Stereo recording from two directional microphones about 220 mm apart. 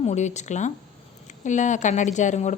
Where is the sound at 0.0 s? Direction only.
30° left (ahead or behind).